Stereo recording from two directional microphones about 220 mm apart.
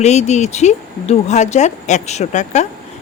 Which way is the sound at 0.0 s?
30° left (ahead or behind).